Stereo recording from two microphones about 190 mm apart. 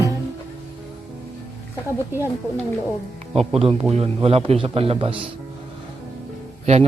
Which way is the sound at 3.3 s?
30° right (ahead or behind).